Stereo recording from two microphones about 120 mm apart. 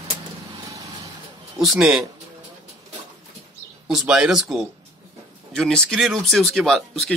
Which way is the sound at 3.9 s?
5° right (ahead or behind).